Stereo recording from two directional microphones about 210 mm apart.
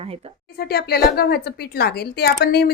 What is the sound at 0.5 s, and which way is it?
A woman's voice, 50° left (ahead or behind).